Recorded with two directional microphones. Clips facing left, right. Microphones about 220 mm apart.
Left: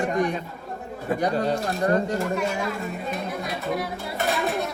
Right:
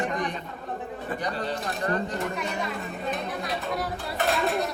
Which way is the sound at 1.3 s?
45° left (ahead or behind).